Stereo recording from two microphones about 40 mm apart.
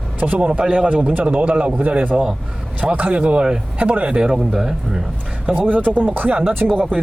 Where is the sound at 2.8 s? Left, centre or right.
Right.